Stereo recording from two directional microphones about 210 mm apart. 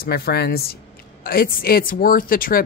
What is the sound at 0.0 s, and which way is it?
Speech, 50° left (ahead or behind).